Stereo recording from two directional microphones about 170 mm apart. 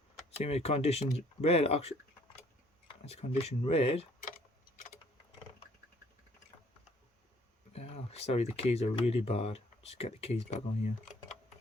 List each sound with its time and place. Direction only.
0.3 s speech: 40° left (ahead or behind)
7.7 s speech: 35° left (ahead or behind)